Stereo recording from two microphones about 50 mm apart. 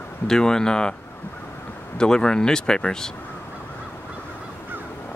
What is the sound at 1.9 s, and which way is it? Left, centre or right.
Speech, centre.